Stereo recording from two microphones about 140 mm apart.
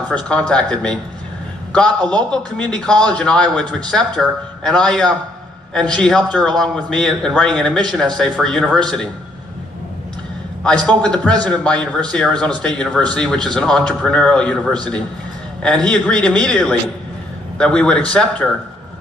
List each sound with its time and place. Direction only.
0.1 s a man's voice: 5° left (ahead or behind)
10.9 s a man's voice: 10° left (ahead or behind)